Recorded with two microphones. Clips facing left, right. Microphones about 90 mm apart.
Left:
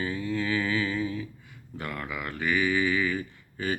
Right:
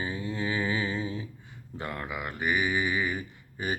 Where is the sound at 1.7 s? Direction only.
25° right (ahead or behind).